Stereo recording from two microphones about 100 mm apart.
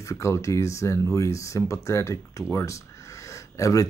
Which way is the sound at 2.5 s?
30° left (ahead or behind).